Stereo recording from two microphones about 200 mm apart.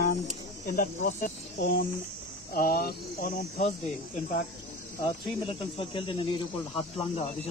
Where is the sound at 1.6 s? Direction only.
50° left (ahead or behind).